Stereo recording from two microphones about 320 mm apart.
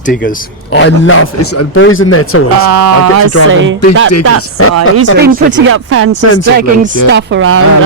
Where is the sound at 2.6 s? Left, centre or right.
Right.